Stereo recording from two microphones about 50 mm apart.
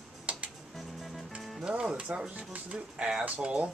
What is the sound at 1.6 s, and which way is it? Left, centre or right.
Speech, right.